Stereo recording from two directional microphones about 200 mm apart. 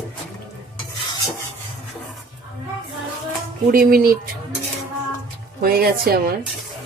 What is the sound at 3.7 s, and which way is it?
Speech, 50° right (ahead or behind).